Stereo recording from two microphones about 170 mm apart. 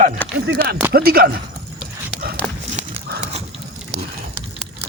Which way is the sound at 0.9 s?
60° right (ahead or behind).